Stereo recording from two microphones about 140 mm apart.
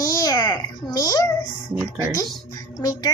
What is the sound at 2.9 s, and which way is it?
Speech, 25° left (ahead or behind).